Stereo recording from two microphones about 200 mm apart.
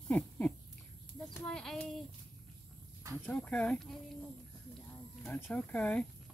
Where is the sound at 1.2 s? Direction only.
5° left (ahead or behind).